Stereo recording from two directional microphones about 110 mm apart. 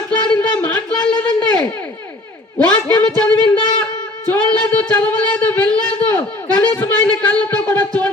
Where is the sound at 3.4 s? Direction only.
50° left (ahead or behind).